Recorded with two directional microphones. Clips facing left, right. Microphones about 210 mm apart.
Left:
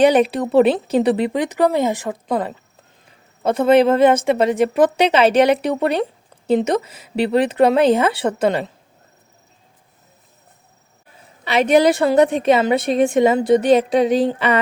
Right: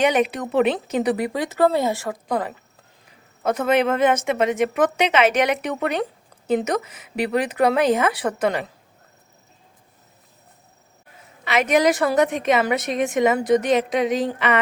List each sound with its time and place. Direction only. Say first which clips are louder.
0.0 s a woman's voice: left 6 dB; 30° left (ahead or behind)
11.4 s a woman's voice: left 4 dB; 30° left (ahead or behind)